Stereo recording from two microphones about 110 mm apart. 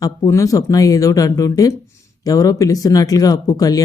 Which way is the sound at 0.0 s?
30° left (ahead or behind).